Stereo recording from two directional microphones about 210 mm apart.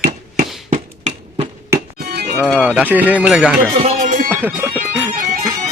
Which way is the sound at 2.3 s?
5° right (ahead or behind).